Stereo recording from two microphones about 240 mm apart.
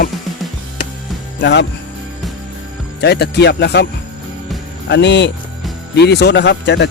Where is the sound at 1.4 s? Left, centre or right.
Left.